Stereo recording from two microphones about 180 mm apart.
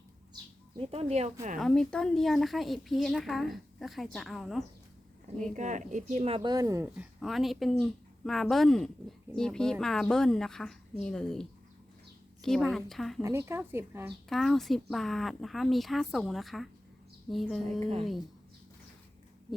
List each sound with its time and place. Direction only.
0.8 s speech: 35° right (ahead or behind)
1.5 s speech: 5° left (ahead or behind)
5.5 s speech: 45° right (ahead or behind); by 6.9 s 15° right (ahead or behind)
6.9 s speech: 5° right (ahead or behind)
13.2 s speech: 15° right (ahead or behind)
14.3 s speech: centre (ahead or behind)
17.7 s speech: 35° right (ahead or behind)